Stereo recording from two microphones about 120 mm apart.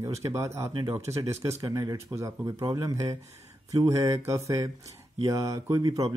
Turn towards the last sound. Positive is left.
turn(degrees=-30)  # may be behind; listen again after turning